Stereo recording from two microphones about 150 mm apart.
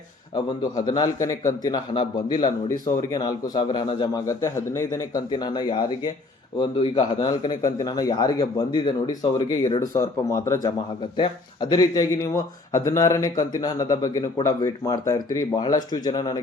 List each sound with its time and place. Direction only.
0.3 s speech: 25° left (ahead or behind)